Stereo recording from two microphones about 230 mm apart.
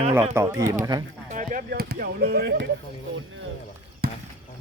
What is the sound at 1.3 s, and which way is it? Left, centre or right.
Speech, right.